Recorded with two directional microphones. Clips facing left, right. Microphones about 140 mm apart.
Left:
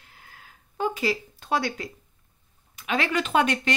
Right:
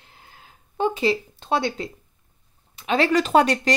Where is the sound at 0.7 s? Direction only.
25° right (ahead or behind).